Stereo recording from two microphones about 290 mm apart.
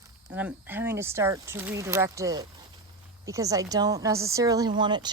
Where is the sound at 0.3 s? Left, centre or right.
Centre.